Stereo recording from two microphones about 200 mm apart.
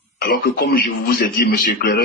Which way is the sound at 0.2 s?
50° left (ahead or behind).